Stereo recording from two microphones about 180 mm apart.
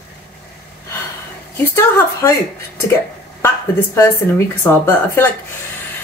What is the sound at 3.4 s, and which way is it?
Speech, 15° left (ahead or behind).